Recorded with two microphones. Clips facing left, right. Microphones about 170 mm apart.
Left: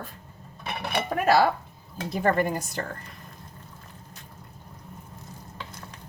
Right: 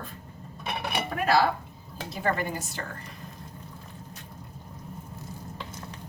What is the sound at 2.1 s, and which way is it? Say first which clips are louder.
Speech: left 5 dB; 50° left (ahead or behind).